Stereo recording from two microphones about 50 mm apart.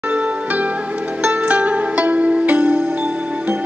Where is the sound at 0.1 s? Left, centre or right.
Right.